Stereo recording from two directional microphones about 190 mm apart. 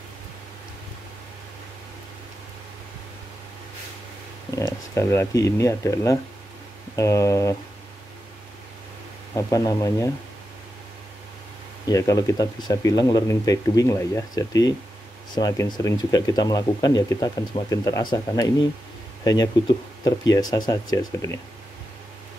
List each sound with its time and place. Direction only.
4.6 s speech: 15° left (ahead or behind)
9.3 s speech: 20° left (ahead or behind)
11.8 s speech: 20° left (ahead or behind)